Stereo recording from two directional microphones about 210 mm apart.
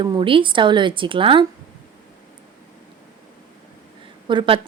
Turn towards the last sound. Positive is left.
turn(degrees=-25)  # may be behind; listen again after turning